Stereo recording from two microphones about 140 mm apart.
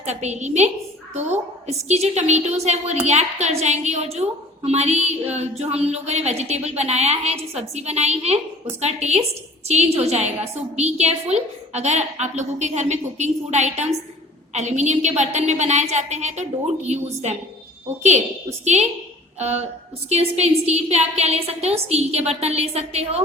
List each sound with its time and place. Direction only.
0.0 s a woman's voice: 55° right (ahead or behind)
18.6 s a woman's voice: 55° right (ahead or behind)